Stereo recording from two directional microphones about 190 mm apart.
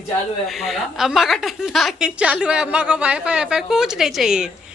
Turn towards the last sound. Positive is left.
turn(degrees=-5)  # may be behind; listen again after turning